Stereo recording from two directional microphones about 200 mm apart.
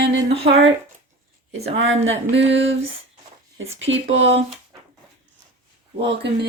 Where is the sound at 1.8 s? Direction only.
75° right (ahead or behind).